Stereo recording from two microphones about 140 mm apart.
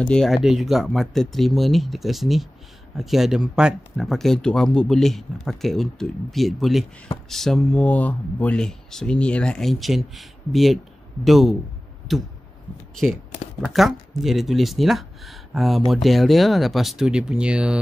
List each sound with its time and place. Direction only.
0.0 s speech: 5° left (ahead or behind)
13.7 s speech: centre (ahead or behind)